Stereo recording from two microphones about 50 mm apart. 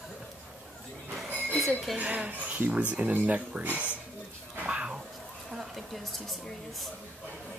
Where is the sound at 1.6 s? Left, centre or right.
Centre.